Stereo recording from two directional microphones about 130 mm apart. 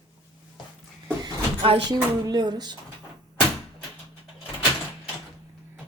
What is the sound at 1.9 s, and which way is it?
Speech, 30° right (ahead or behind).